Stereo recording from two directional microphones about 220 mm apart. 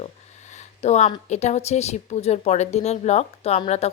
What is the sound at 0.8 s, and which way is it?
Speech, 30° left (ahead or behind).